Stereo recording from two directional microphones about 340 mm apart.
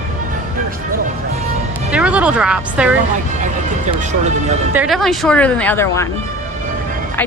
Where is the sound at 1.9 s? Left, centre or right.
Centre.